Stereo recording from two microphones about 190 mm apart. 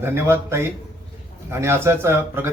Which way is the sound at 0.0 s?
10° right (ahead or behind).